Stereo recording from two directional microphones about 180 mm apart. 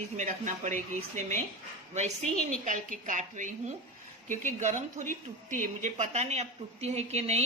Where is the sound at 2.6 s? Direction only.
45° right (ahead or behind).